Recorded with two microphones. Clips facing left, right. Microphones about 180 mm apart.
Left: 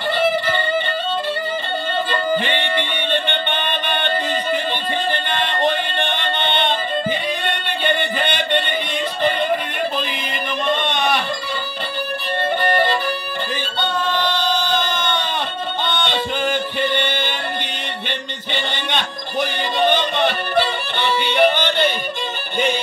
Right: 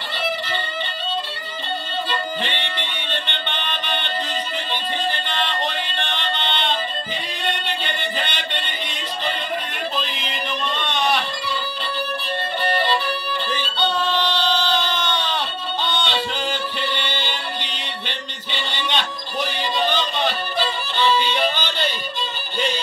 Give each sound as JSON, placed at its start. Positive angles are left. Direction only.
{"t": 0.2, "sound": "music", "side_deg": 50}
{"t": 2.0, "sound": "music", "side_deg": 55}
{"t": 5.3, "sound": "music", "side_deg": 50}
{"t": 10.1, "sound": "music", "side_deg": 50}
{"t": 12.6, "sound": "violin", "side_deg": 50}
{"t": 14.6, "sound": "a sound", "side_deg": 50}
{"t": 15.9, "sound": "music", "side_deg": 55}